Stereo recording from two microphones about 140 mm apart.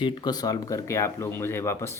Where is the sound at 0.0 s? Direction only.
30° left (ahead or behind).